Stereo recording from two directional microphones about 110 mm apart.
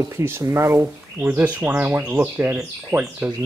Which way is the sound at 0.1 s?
25° right (ahead or behind).